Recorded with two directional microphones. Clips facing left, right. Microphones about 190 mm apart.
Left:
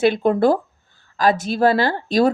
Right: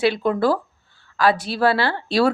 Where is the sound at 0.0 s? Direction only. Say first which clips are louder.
Left 3 dB; 50° left (ahead or behind).